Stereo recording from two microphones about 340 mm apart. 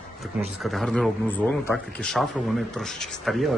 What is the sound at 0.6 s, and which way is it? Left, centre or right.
Speech, centre.